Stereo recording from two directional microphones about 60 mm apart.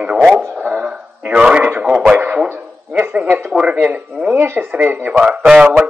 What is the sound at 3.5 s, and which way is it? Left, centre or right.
Speech, centre.